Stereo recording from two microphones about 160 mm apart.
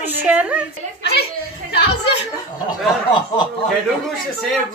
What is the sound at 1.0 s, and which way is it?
Speech, 90° left.